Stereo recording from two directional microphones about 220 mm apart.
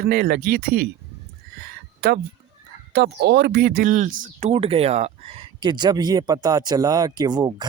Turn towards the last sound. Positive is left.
turn(degrees=-20)  # may be behind; listen again after turning